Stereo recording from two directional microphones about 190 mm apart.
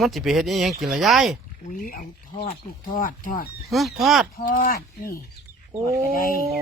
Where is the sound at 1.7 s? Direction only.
45° left (ahead or behind).